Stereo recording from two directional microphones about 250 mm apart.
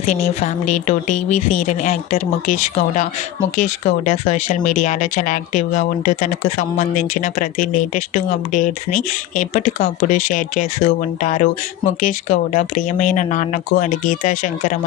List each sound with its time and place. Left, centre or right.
0.1 s speech: left